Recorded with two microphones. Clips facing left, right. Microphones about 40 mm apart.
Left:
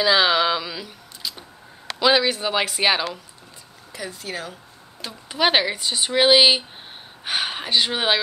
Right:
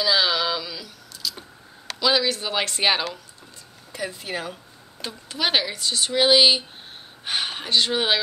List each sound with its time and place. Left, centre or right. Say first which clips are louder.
0.0 s a sound: left 4 dB; left
2.0 s speech: left 3 dB; left; by 3.1 s centre
3.9 s speech: right 2 dB; centre
5.3 s speech: left 4 dB; centre